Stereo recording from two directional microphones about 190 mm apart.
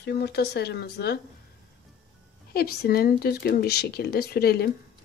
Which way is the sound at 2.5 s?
55° left (ahead or behind).